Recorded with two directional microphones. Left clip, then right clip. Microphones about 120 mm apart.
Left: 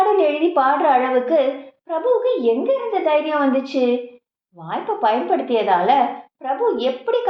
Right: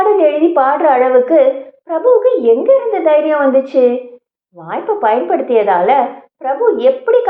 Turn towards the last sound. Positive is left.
turn(degrees=0)  # may be behind; listen again after turning